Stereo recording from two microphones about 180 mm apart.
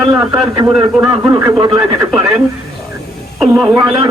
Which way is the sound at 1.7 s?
5° right (ahead or behind).